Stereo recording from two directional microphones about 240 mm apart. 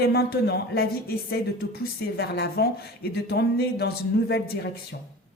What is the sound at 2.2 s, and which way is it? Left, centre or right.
Speech, left.